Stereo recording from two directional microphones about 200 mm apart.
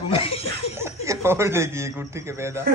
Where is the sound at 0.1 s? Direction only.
30° left (ahead or behind).